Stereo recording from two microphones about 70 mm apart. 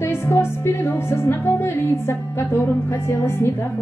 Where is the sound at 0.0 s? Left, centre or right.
Left.